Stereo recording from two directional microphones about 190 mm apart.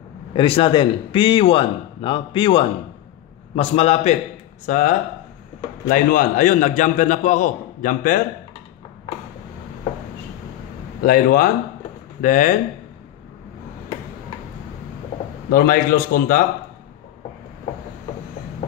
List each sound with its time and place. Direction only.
0.3 s a man's voice: 30° left (ahead or behind); by 8.2 s 45° left (ahead or behind)
11.1 s a man's voice: 50° left (ahead or behind)
15.5 s a man's voice: 50° left (ahead or behind)